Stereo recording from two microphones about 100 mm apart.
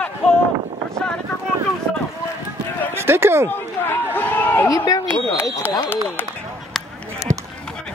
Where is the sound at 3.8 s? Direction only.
20° left (ahead or behind).